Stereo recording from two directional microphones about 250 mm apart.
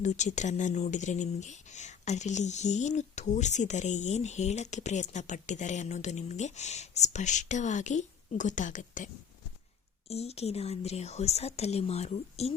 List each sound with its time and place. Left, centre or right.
0.0 s speech: left
10.1 s speech: left